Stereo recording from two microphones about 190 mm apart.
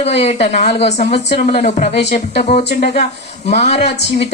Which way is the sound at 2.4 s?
35° left (ahead or behind).